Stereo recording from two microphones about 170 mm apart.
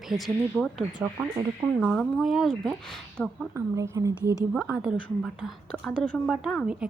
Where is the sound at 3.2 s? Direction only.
10° left (ahead or behind).